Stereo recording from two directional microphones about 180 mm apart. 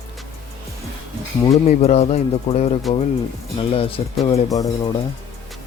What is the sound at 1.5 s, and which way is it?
Speech, 35° left (ahead or behind).